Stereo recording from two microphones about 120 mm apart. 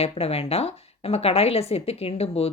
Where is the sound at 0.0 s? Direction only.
55° left (ahead or behind).